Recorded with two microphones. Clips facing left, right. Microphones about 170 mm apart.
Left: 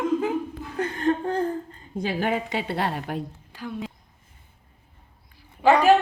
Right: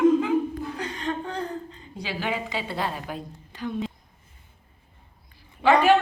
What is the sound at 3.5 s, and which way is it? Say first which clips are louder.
Speech: right 4 dB; 5° left (ahead or behind).